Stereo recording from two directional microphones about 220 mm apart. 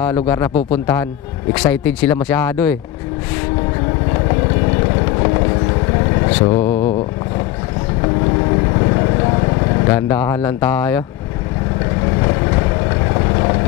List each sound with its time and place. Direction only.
0.0 s speech: 10° left (ahead or behind)
6.2 s vehicle: 20° left (ahead or behind)
9.1 s vehicle: 20° left (ahead or behind)
13.1 s vehicle: 20° left (ahead or behind)